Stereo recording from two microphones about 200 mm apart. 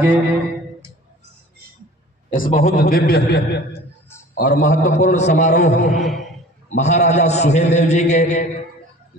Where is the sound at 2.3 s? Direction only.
40° left (ahead or behind).